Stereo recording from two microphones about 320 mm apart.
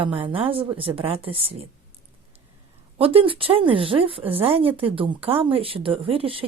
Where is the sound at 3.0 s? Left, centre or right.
Centre.